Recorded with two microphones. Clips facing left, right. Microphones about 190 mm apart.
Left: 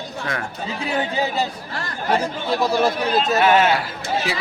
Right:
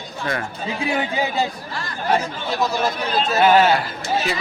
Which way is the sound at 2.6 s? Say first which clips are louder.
Left 2 dB; 30° left (ahead or behind).